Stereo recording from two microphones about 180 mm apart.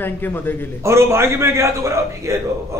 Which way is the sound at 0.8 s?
15° right (ahead or behind).